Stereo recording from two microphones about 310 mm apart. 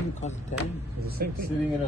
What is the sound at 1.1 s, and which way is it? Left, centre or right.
Speech, right.